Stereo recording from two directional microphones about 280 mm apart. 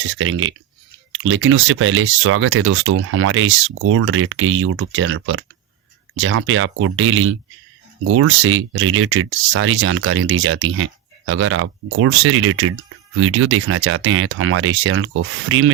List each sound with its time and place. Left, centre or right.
0.1 s speech: right